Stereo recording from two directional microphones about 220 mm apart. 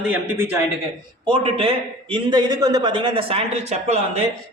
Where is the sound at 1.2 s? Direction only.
25° right (ahead or behind).